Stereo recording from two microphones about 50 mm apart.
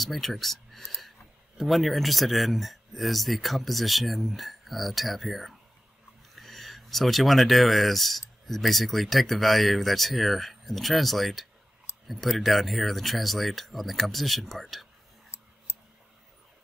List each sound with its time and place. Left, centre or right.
0.0 s speech: centre
15.3 s clicking: left